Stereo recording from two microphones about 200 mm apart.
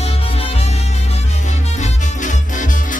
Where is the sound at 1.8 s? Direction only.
40° left (ahead or behind).